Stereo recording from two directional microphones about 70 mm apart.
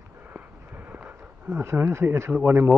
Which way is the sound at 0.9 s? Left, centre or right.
Right.